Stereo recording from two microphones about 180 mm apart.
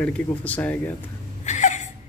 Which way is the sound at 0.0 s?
10° left (ahead or behind).